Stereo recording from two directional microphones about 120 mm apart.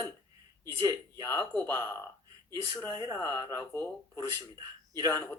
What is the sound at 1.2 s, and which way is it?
Speech, 25° left (ahead or behind).